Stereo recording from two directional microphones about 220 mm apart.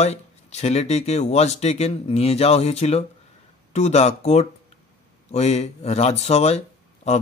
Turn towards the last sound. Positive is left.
turn(degrees=30)  # may be behind; listen again after turning